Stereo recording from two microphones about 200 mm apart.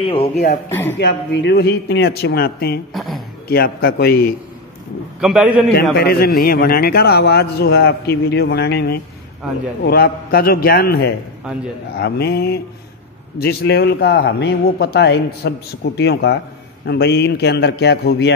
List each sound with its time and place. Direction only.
0.0 s speech: 30° left (ahead or behind)
0.7 s speech: 10° left (ahead or behind)
0.9 s a man's voice: 60° left (ahead or behind)
2.9 s speech: centre (ahead or behind)
3.4 s a man's voice: 50° left (ahead or behind)
5.2 s a man's voice: 5° right (ahead or behind)
5.9 s a man's voice: 50° left (ahead or behind)